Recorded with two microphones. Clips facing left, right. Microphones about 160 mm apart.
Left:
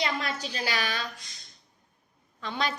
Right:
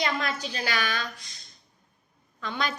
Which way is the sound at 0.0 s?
35° left (ahead or behind).